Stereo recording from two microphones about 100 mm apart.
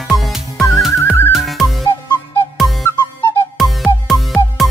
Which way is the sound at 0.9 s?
25° left (ahead or behind).